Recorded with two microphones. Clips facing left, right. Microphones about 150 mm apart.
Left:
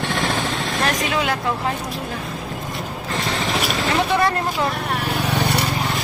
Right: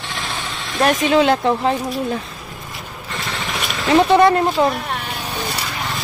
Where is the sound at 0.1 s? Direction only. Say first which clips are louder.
Left 3 dB; 45° left (ahead or behind).